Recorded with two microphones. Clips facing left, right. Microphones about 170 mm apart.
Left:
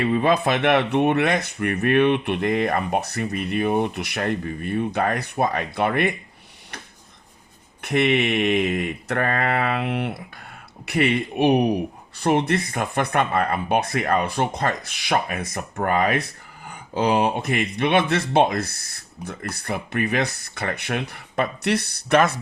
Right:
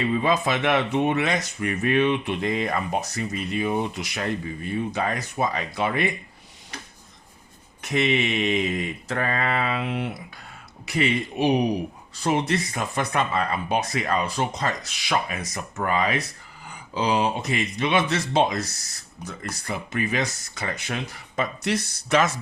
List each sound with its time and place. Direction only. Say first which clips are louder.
0.0 s speech: left 3 dB; 60° left (ahead or behind)
7.8 s speech: left 3 dB; 60° left (ahead or behind)